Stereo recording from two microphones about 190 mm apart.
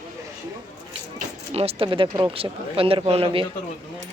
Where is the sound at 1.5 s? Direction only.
30° right (ahead or behind).